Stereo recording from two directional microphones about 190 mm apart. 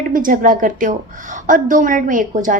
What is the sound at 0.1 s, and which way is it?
A woman's voice, 45° right (ahead or behind).